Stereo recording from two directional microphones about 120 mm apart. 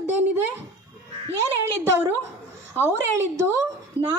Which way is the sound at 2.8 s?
20° right (ahead or behind).